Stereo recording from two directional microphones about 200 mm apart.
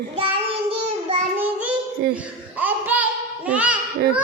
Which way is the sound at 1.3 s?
10° right (ahead or behind).